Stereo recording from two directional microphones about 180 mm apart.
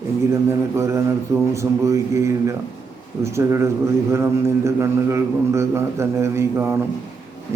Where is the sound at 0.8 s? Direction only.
15° right (ahead or behind).